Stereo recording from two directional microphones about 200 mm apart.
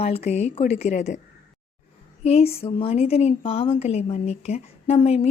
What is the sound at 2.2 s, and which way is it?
A woman's voice, 30° left (ahead or behind).